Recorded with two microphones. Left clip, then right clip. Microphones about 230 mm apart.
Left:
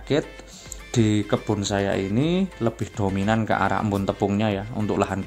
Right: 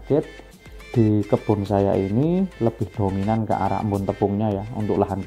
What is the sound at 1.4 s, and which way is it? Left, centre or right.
Speech, centre.